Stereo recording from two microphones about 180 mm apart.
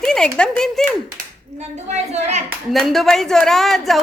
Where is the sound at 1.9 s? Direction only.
40° right (ahead or behind).